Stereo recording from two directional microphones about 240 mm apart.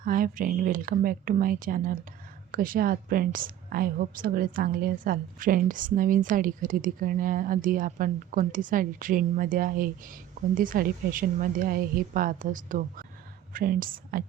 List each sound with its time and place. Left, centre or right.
0.0 s a woman's voice: right